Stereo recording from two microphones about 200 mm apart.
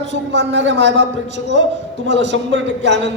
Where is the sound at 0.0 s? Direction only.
65° right (ahead or behind).